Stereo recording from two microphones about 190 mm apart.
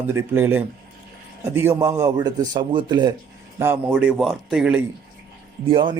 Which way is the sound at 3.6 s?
10° right (ahead or behind).